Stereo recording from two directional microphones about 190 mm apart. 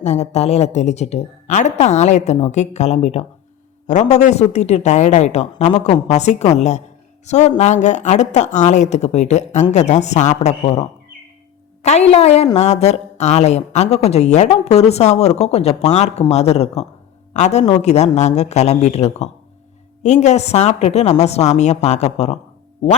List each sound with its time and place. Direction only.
0.0 s speech: 35° left (ahead or behind)